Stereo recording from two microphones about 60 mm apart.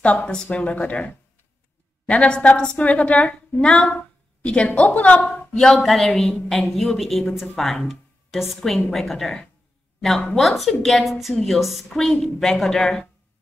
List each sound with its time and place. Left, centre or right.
0.0 s a woman's voice: left
5.5 s a woman's voice: centre